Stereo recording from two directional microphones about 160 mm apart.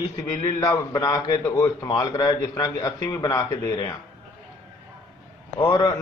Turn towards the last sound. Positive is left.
turn(degrees=25)  # may be behind; listen again after turning